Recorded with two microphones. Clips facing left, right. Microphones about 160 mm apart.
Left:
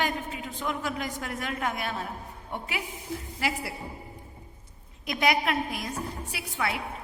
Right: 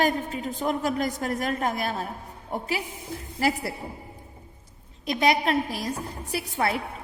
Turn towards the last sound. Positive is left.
turn(degrees=-40)  # may be behind; listen again after turning